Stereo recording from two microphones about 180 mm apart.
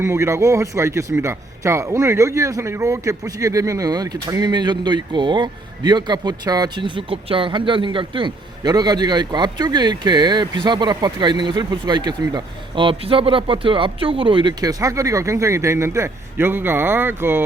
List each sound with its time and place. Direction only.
0.0 s speech: 15° right (ahead or behind)